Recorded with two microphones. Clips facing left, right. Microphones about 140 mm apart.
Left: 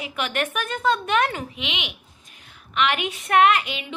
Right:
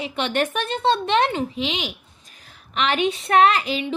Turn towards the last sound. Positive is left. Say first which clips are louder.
# right 1 dB
turn(degrees=-30)  # may be behind; listen again after turning